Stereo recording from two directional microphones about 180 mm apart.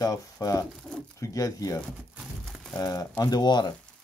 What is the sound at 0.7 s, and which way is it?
Speech, centre (ahead or behind).